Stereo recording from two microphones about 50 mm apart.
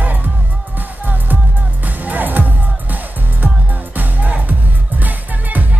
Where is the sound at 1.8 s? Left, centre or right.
Right.